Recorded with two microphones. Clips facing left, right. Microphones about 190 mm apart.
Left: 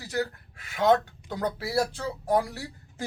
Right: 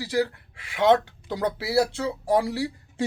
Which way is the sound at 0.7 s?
30° right (ahead or behind).